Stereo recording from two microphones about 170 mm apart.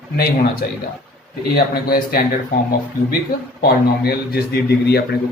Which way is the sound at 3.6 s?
65° left (ahead or behind).